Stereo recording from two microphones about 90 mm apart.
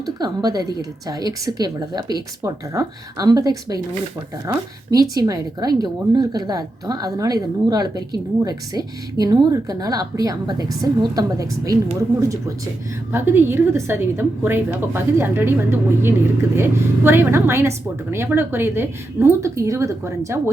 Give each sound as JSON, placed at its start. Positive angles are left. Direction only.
{"t": 0.0, "sound": "speech", "side_deg": -45}
{"t": 13.1, "sound": "a woman's voice", "side_deg": -25}